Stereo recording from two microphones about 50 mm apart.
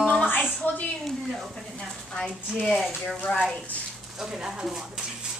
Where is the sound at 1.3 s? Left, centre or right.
Centre.